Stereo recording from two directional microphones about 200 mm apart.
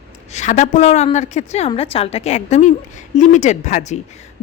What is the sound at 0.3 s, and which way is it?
A woman's voice, 35° left (ahead or behind).